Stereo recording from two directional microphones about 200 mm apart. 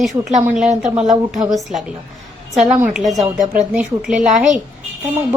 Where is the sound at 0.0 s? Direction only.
Centre (ahead or behind).